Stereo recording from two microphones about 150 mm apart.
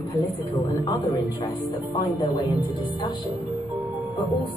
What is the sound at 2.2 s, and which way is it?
Speech, 25° left (ahead or behind).